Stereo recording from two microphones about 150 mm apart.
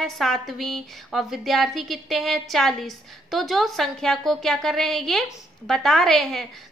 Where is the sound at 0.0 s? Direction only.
Centre (ahead or behind).